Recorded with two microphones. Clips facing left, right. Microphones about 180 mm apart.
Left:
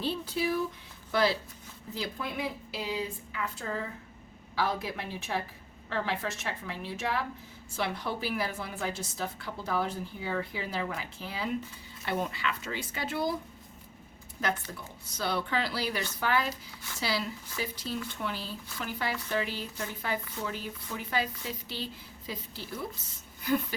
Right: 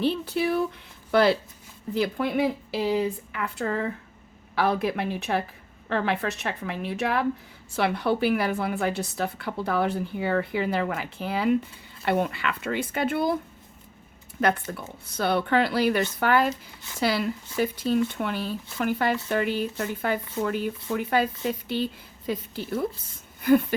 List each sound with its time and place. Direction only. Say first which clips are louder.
0.0 s a woman's voice: right 6 dB; 65° right (ahead or behind)
14.4 s a woman's voice: right 8 dB; 60° right (ahead or behind)
23.4 s a sound: right 10 dB; 55° right (ahead or behind)